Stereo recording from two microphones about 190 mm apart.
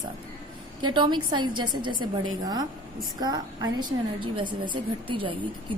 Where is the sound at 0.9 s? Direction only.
25° right (ahead or behind).